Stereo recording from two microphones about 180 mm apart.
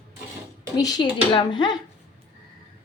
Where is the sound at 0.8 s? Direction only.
20° left (ahead or behind).